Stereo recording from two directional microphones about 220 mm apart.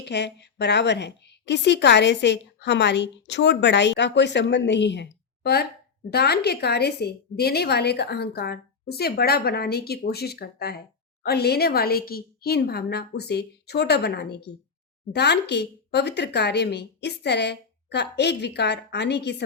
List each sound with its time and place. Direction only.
0.0 s a woman's voice: 50° left (ahead or behind)